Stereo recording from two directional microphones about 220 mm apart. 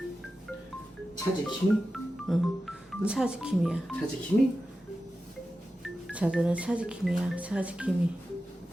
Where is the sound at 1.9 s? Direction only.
Centre (ahead or behind).